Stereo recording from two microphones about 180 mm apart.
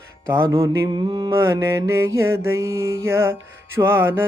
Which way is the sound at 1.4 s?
15° right (ahead or behind).